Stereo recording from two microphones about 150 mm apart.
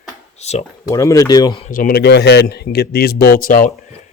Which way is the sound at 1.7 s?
80° left.